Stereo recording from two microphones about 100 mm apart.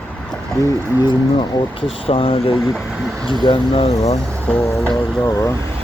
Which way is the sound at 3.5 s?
60° left (ahead or behind).